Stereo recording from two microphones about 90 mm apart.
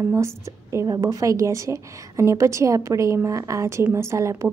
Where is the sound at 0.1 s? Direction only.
30° right (ahead or behind).